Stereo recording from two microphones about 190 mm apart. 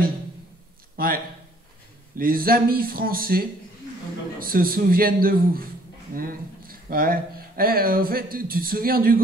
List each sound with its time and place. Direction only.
0.9 s speech: 50° right (ahead or behind)